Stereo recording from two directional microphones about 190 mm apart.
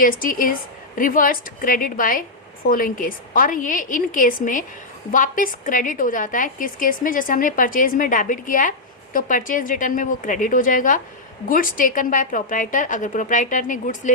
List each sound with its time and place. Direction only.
0.0 s a woman's voice: 45° left (ahead or behind)